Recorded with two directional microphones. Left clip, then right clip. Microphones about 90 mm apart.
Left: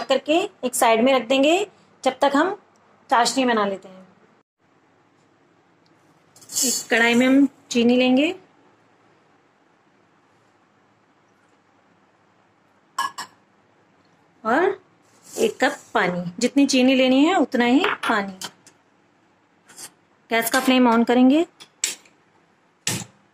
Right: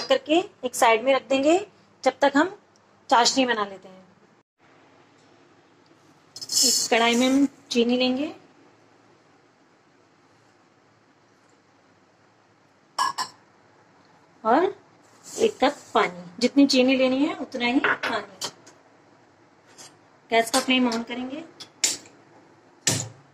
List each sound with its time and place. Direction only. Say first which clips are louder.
0.0 s a woman's voice: left 2 dB; 35° left (ahead or behind)
3.1 s a woman's voice: even; 15° left (ahead or behind)
3.3 s a woman's voice: left 3 dB; 30° left (ahead or behind)
6.5 s a woman's voice: right 1 dB; 35° left (ahead or behind)
12.9 s frog: right 2 dB; 30° left (ahead or behind)
14.4 s a woman's voice: left 1 dB; 30° left (ahead or behind)
20.2 s a woman's voice: left 2 dB; 30° left (ahead or behind)
22.8 s a sound: right 2 dB; 35° left (ahead or behind)